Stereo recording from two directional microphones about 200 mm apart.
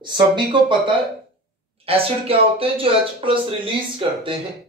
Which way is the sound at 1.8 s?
30° right (ahead or behind).